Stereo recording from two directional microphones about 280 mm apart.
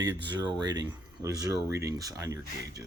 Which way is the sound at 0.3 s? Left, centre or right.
Centre.